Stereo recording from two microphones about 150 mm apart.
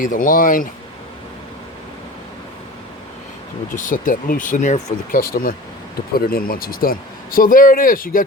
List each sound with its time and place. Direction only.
0.0 s speech: 65° left (ahead or behind)
3.7 s speech: 65° left (ahead or behind)
6.1 s speech: 85° left; by 8.2 s 70° left (ahead or behind)